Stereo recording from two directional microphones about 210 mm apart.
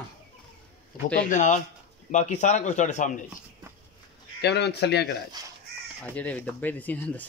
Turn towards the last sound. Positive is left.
turn(degrees=10)  # may be behind; listen again after turning